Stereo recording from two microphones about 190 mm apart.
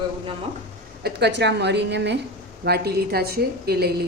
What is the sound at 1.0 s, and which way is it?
Speech, 60° right (ahead or behind).